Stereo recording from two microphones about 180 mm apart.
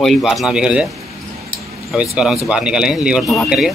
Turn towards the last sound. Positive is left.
turn(degrees=0)  # may be behind; listen again after turning